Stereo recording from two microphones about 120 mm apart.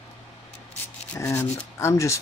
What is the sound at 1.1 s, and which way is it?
Speech, 20° left (ahead or behind).